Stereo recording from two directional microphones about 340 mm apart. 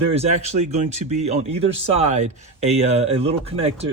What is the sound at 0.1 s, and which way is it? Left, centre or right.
Speech, centre.